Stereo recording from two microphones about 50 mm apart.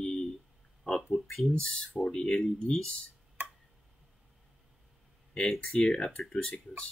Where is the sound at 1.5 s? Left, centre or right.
Centre.